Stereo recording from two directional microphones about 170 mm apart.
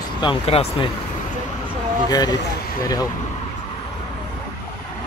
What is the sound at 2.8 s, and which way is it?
Speech, 20° left (ahead or behind).